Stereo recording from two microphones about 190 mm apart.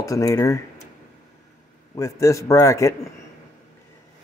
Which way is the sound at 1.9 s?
15° left (ahead or behind).